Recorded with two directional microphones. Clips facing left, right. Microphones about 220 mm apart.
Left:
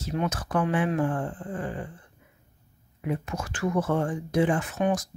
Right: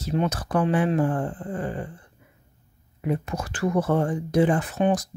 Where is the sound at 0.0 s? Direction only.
30° right (ahead or behind).